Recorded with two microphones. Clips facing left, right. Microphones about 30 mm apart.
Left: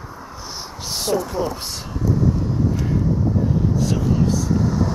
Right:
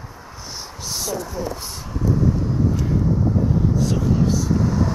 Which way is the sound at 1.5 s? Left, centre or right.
Left.